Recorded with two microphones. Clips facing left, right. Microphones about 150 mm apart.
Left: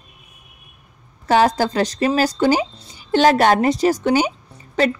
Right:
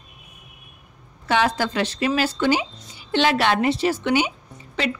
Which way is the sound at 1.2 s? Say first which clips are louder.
Left 5 dB; 40° left (ahead or behind).